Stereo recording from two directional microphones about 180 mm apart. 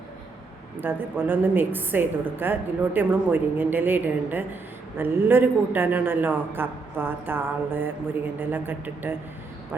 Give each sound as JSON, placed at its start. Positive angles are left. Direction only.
{"t": 0.8, "sound": "a woman's voice", "side_deg": -10}